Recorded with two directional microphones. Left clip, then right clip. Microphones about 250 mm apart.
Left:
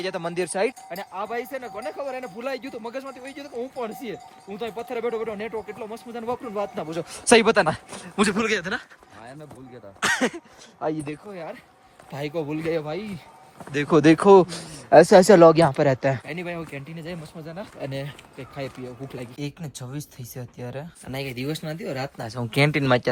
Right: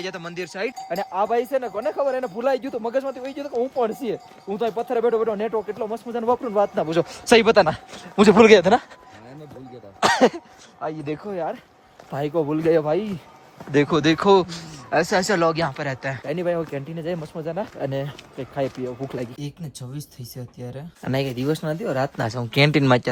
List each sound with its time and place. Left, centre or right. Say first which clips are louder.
0.0 s speech: left 3 dB; centre
0.9 s speech: right 8 dB; right
7.3 s speech: right 2 dB; centre
10.0 s speech: right 6 dB; centre
10.8 s speech: left 2 dB; centre
12.1 s speech: right 6 dB; centre
13.8 s speech: left 5 dB; centre
16.2 s speech: right 8 dB; centre
21.0 s speech: right 10 dB; right
21.2 s speech: right 6 dB; centre
22.4 s speech: right 3 dB; centre